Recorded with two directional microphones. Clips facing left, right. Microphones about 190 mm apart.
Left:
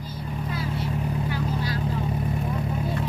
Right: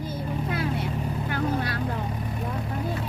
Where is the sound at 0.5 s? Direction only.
60° right (ahead or behind).